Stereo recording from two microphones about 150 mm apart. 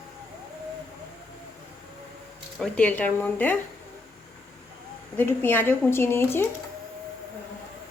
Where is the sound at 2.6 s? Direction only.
5° left (ahead or behind).